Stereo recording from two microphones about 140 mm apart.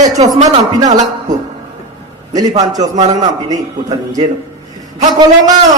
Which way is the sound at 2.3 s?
30° right (ahead or behind).